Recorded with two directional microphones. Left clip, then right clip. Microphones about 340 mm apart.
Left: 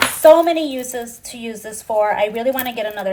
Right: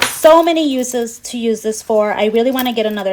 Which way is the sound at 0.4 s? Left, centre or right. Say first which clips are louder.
Right 4 dB; right.